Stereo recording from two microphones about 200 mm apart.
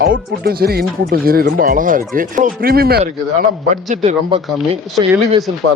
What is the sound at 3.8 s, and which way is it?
Speech, 35° right (ahead or behind).